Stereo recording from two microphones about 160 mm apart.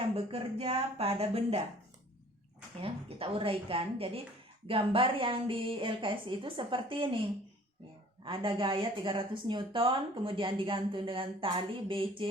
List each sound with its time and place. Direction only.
0.2 s speech: 35° right (ahead or behind)
2.8 s speech: 35° right (ahead or behind)
8.2 s speech: 30° right (ahead or behind)